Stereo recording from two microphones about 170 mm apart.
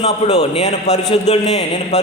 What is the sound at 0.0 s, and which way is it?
A man's voice, 35° left (ahead or behind).